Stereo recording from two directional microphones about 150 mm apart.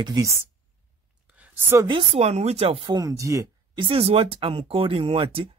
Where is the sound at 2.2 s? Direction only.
45° right (ahead or behind); by 3.5 s 20° right (ahead or behind).